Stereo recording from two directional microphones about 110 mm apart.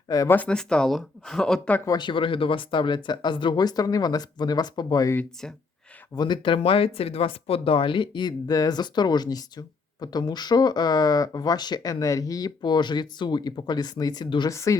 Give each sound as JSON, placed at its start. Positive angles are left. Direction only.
{"t": 0.3, "sound": "speech", "side_deg": 10}
{"t": 2.0, "sound": "speech", "side_deg": 50}
{"t": 6.1, "sound": "speech", "side_deg": 45}
{"t": 14.5, "sound": "speech", "side_deg": 30}